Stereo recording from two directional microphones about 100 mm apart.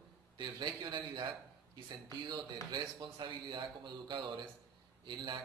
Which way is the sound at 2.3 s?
45° right (ahead or behind).